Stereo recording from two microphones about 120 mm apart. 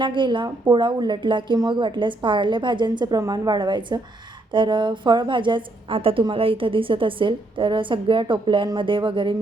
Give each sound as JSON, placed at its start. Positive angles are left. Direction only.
{"t": 0.0, "sound": "a woman's voice", "side_deg": -40}